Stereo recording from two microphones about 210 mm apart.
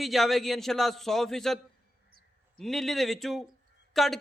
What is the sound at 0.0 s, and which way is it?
A man's voice, centre (ahead or behind).